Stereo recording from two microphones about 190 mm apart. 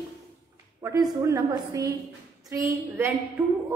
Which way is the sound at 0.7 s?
20° right (ahead or behind).